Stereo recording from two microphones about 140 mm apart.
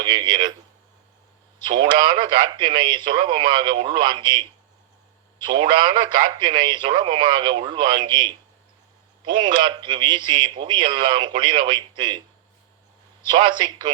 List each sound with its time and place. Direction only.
0.0 s a man's voice: 30° right (ahead or behind)
1.6 s a man's voice: 35° right (ahead or behind)
13.2 s a man's voice: 35° right (ahead or behind)